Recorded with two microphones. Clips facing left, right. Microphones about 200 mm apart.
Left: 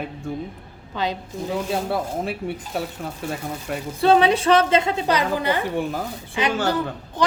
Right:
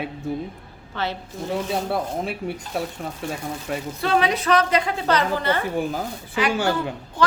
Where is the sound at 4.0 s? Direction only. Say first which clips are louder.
Left 6 dB; 30° left (ahead or behind).